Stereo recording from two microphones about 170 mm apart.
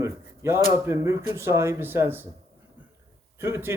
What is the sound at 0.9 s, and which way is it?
A man's voice, 15° right (ahead or behind).